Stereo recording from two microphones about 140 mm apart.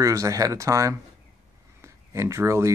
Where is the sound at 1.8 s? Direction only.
20° right (ahead or behind).